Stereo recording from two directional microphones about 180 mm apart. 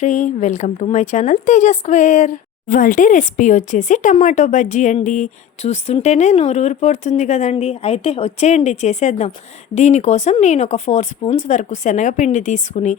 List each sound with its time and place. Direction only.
0.0 s speech: 40° left (ahead or behind)